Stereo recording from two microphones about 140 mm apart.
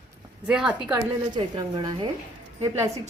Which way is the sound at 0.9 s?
30° right (ahead or behind).